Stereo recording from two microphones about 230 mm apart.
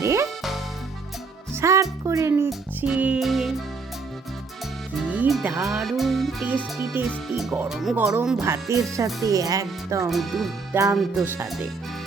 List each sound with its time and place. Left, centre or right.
0.0 s music: centre
1.5 s music: centre
5.0 s speech: centre
10.1 s speech: centre